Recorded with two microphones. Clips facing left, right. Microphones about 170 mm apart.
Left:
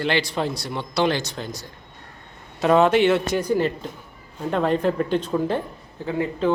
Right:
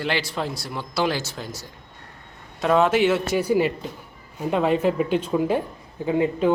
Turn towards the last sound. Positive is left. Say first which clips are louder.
# right 2 dB
turn(degrees=-15)  # may be behind; listen again after turning